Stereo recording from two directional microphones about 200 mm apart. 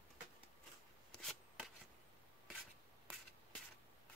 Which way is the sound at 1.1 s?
Centre (ahead or behind).